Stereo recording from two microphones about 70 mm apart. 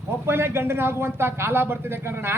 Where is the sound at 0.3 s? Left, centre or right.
Right.